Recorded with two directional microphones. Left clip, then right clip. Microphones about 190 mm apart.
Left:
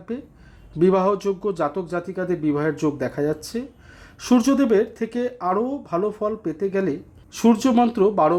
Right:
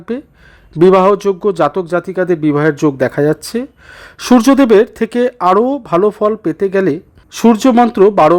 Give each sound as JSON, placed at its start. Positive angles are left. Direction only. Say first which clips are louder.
{"t": 0.7, "sound": "a man's voice", "louder": "right 11 dB", "side_deg": -35}